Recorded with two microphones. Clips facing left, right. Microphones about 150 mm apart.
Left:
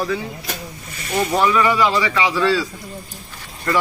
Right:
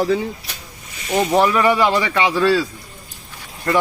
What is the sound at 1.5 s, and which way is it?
Speech, 40° right (ahead or behind).